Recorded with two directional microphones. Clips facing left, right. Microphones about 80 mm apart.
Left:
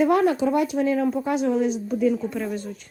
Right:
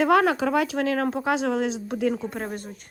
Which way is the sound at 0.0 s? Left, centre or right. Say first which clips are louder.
Left 1 dB; right.